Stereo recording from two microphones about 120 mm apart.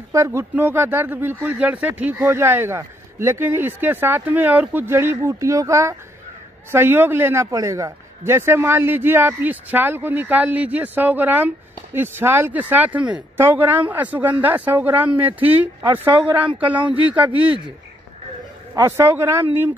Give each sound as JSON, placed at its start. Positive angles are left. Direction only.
{"t": 0.1, "sound": "a man's voice", "side_deg": -25}
{"t": 18.8, "sound": "speech", "side_deg": -25}